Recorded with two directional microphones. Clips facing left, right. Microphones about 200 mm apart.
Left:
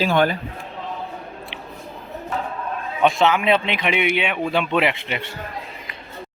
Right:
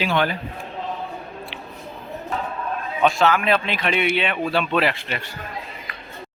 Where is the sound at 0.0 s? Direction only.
45° left (ahead or behind).